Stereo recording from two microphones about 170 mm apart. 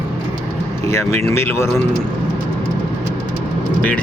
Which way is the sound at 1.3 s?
15° left (ahead or behind).